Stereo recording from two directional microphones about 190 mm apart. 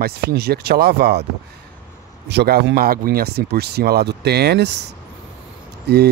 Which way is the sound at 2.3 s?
60° right (ahead or behind).